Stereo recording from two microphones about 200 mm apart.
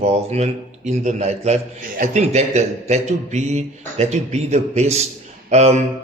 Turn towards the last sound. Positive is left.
turn(degrees=-35)  # may be behind; listen again after turning